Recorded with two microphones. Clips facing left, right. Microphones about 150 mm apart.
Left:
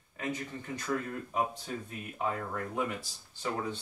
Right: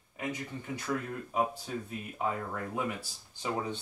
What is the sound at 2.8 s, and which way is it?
Speech, 15° right (ahead or behind).